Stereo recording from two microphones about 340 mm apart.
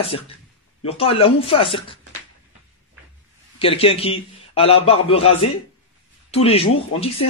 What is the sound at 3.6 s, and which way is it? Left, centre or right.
A man's voice, centre.